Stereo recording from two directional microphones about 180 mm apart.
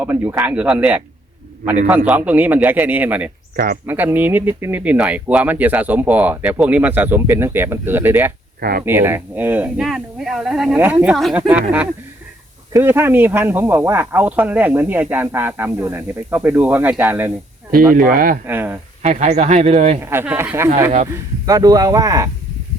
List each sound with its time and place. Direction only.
0.0 s speech: 10° right (ahead or behind)
2.0 s speech: 10° right (ahead or behind)
3.5 s speech: 55° right (ahead or behind)
3.8 s speech: 10° right (ahead or behind)
12.7 s speech: 15° right (ahead or behind)
17.9 s speech: 50° right (ahead or behind)
18.4 s speech: 10° right (ahead or behind)
19.0 s speech: 40° right (ahead or behind)
20.0 s speech: 10° right (ahead or behind)